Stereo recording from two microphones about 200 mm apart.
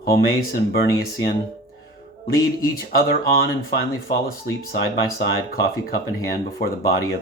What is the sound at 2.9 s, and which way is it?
Speech, 50° left (ahead or behind).